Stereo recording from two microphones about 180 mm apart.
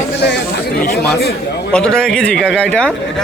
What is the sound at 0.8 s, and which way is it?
Speech, 60° left (ahead or behind).